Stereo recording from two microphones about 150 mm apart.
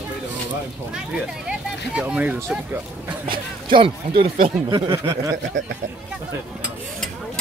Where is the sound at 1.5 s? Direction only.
5° right (ahead or behind).